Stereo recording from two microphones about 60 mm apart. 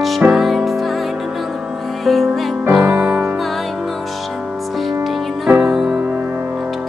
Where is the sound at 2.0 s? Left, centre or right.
Centre.